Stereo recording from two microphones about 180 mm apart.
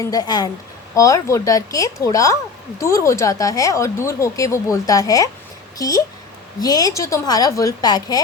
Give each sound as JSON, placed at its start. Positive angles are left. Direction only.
{"t": 0.0, "sound": "a woman's voice", "side_deg": 20}